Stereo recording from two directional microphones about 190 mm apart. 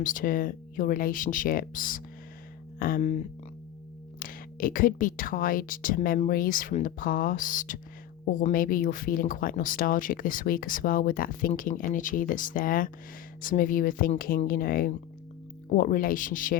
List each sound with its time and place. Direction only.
0.0 s speech: 45° left (ahead or behind)
2.7 s music: 50° left (ahead or behind)
4.2 s speech: 50° left (ahead or behind)